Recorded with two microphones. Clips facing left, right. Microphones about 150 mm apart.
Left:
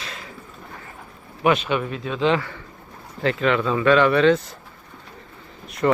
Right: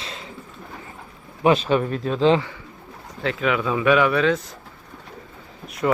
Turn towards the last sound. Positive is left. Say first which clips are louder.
# left 2 dB
turn(degrees=-5)  # may be behind; listen again after turning